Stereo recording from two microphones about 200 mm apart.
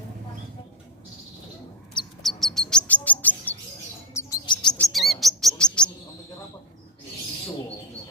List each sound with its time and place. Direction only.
2.2 s chirp: centre (ahead or behind); by 4.5 s 15° left (ahead or behind)
4.8 s chirp: centre (ahead or behind)